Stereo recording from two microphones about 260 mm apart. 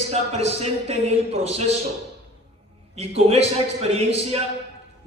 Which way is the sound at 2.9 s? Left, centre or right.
Right.